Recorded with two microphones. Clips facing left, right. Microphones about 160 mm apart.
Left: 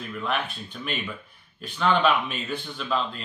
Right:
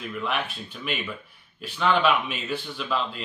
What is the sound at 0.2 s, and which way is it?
Speech, 5° right (ahead or behind).